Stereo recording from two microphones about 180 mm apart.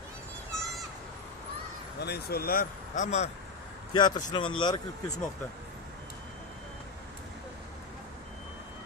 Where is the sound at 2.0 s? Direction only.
65° left (ahead or behind); by 3.2 s 40° left (ahead or behind).